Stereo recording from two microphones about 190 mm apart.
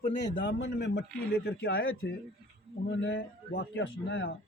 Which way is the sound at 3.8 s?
90° left.